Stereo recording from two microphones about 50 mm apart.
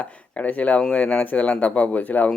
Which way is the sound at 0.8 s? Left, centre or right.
Centre.